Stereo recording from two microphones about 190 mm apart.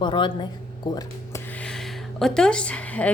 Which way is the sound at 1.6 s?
5° left (ahead or behind).